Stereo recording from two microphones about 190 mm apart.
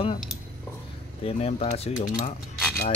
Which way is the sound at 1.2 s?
30° left (ahead or behind).